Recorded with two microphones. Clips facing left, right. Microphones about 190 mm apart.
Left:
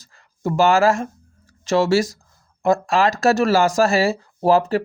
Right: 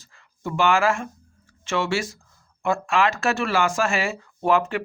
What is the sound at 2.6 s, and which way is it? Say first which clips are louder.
Speech: left 4 dB; 40° left (ahead or behind).